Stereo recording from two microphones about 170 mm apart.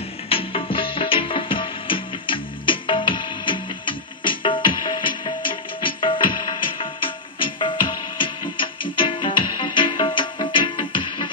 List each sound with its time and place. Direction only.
0.3 s music: 30° left (ahead or behind)